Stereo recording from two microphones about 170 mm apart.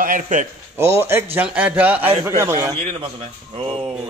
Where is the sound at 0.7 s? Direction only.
15° right (ahead or behind).